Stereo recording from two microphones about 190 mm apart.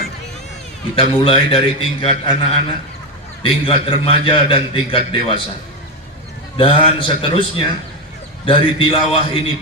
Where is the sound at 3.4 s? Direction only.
30° left (ahead or behind).